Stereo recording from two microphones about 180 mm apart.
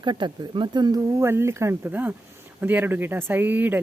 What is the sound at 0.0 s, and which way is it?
Speech, 25° right (ahead or behind).